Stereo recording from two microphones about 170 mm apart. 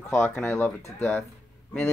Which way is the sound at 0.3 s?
10° left (ahead or behind).